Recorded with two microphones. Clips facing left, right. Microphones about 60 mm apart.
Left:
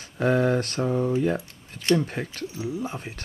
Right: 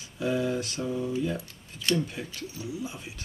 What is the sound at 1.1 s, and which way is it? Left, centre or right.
Speech, left.